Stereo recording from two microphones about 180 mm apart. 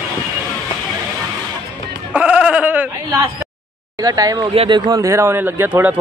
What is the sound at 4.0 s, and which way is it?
Speech, 20° right (ahead or behind).